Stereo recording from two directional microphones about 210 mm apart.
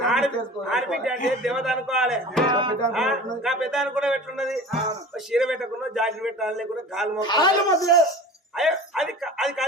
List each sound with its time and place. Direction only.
0.0 s a sound: centre (ahead or behind)
0.7 s speech: centre (ahead or behind)
2.5 s music: 20° right (ahead or behind)
2.9 s speech: centre (ahead or behind)
7.2 s speech: 20° left (ahead or behind)
8.5 s speech: centre (ahead or behind)